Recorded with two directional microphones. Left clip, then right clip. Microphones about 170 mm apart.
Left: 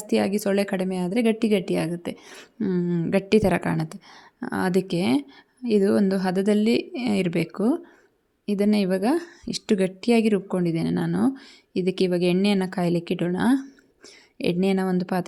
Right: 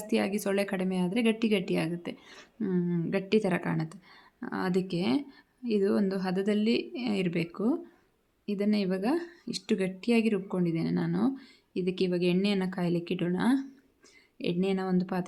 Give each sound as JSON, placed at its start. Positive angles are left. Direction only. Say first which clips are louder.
{"t": 0.1, "sound": "a woman's voice", "louder": "left 7 dB", "side_deg": 35}